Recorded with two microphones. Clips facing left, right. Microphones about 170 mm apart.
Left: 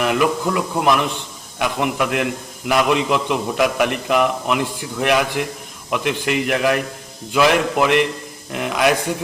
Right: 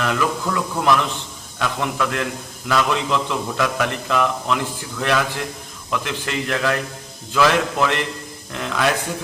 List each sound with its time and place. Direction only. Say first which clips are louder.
0.0 s a man's voice: left 4 dB; 15° left (ahead or behind)